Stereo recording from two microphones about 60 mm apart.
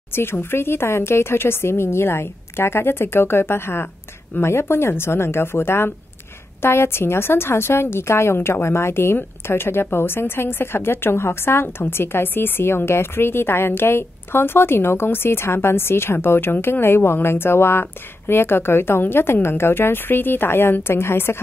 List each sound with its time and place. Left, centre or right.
0.1 s a woman's voice: left